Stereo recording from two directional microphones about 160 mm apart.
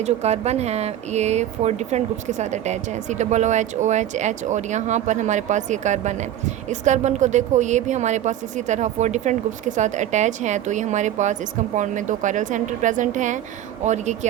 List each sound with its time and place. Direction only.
0.0 s speech: 45° right (ahead or behind)